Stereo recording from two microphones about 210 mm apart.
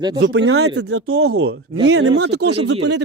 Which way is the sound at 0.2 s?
55° right (ahead or behind).